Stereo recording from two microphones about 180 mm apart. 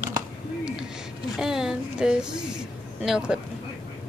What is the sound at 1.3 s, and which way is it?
A woman's voice, 5° right (ahead or behind).